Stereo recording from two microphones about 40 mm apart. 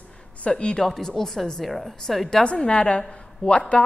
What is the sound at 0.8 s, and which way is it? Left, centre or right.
A woman's voice, centre.